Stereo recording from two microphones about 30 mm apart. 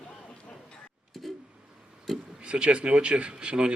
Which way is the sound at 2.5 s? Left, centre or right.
Right.